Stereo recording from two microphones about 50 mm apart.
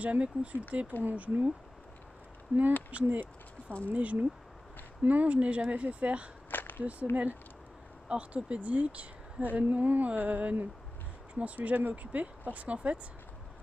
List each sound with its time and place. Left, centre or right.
0.0 s speech: right
2.5 s speech: right
6.5 s a sound: left
6.8 s speech: right
8.1 s speech: right
9.6 s a sound: right
11.3 s speech: right